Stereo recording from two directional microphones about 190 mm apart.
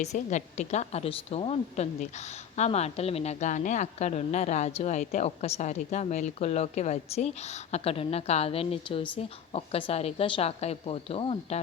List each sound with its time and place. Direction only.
0.0 s a woman's voice: 35° left (ahead or behind)